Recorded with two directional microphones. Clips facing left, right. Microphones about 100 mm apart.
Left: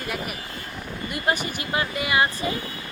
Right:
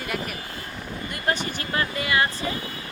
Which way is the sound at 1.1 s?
10° left (ahead or behind).